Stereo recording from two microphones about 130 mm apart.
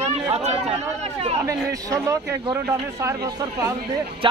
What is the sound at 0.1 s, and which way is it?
Speech, 55° right (ahead or behind).